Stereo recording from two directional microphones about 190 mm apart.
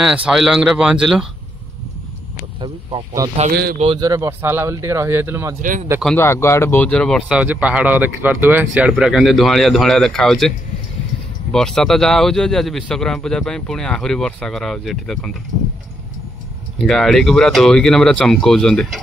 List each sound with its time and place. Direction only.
0.0 s speech: 5° right (ahead or behind)
2.3 s a sound: 25° right (ahead or behind)
3.7 s speech: 30° right (ahead or behind); by 5.6 s 15° right (ahead or behind)
5.6 s speech: 45° right (ahead or behind)
6.0 s speech: 10° left (ahead or behind)
11.5 s speech: centre (ahead or behind)
16.7 s speech: centre (ahead or behind)